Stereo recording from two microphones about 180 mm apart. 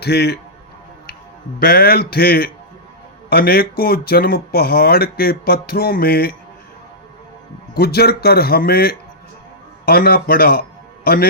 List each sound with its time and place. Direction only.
0.0 s speech: 65° left (ahead or behind)
1.5 s speech: 55° left (ahead or behind)
7.7 s a man's voice: 60° left (ahead or behind)